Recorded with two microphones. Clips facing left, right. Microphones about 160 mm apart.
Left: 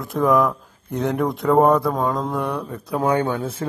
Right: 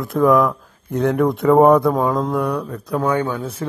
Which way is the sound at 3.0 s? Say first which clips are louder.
Even; 20° left (ahead or behind).